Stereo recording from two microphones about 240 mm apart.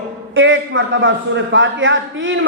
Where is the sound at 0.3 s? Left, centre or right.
Right.